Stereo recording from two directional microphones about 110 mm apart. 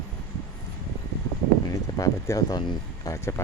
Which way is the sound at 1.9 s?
30° left (ahead or behind).